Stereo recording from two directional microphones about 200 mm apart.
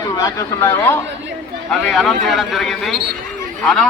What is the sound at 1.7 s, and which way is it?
A man's voice, centre (ahead or behind).